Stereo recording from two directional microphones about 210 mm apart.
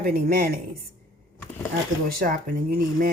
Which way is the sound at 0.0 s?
45° right (ahead or behind).